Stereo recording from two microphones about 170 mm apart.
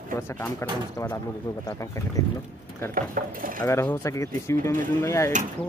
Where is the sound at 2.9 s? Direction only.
55° right (ahead or behind).